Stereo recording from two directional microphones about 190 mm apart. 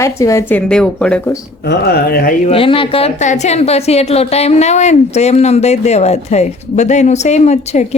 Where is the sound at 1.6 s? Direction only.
60° left (ahead or behind).